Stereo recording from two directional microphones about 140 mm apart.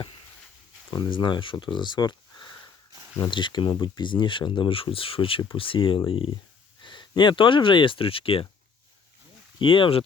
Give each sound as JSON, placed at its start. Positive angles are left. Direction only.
{"t": 0.9, "sound": "speech", "side_deg": 35}
{"t": 9.6, "sound": "speech", "side_deg": 35}